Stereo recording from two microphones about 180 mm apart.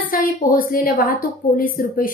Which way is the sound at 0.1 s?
50° left (ahead or behind).